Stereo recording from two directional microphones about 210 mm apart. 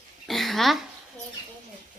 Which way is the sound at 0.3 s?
Centre (ahead or behind).